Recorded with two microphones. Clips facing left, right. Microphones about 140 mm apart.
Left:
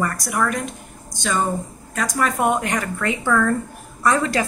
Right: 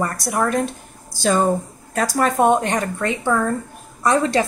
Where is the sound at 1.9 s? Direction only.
35° right (ahead or behind).